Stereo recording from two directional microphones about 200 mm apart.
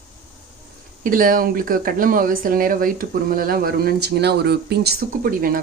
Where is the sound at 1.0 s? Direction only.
45° right (ahead or behind).